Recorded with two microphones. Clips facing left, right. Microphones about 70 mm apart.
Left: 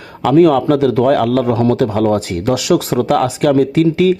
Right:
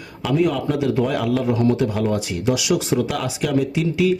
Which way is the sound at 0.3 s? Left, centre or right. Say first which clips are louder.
Left 10 dB; left.